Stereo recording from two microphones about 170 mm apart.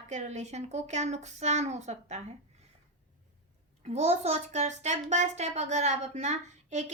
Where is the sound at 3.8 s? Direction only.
40° right (ahead or behind).